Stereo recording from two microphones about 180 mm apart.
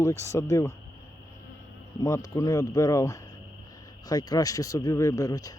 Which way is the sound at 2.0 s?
15° left (ahead or behind).